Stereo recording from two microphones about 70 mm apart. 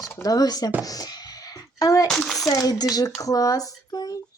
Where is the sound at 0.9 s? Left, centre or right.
Left.